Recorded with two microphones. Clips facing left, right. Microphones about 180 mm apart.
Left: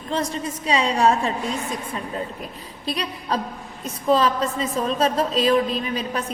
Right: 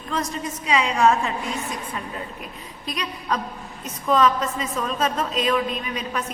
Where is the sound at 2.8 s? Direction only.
30° left (ahead or behind).